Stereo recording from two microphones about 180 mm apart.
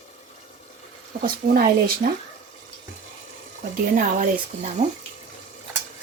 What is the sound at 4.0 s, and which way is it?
Speech, 45° right (ahead or behind).